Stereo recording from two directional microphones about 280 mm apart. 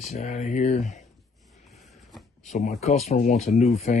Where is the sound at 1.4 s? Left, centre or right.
Centre.